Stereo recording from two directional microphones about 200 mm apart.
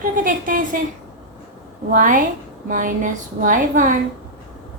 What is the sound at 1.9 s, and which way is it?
A woman's voice, 45° right (ahead or behind).